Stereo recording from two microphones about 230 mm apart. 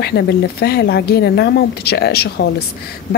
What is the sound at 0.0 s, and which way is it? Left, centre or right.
Speech, left.